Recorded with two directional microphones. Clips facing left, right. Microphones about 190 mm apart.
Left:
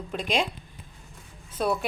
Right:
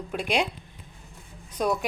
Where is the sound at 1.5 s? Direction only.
15° right (ahead or behind).